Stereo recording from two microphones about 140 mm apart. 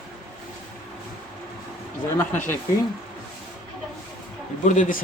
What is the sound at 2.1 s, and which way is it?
Speech, 15° left (ahead or behind).